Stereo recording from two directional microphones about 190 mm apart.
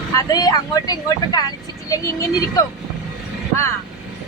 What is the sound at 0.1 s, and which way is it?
Speech, 15° left (ahead or behind).